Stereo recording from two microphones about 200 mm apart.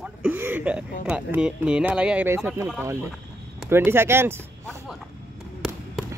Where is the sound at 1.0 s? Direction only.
5° right (ahead or behind).